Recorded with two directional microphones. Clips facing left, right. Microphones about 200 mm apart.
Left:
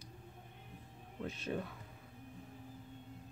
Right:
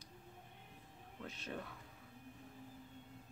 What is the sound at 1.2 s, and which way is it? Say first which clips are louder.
Speech: left 7 dB; 20° left (ahead or behind).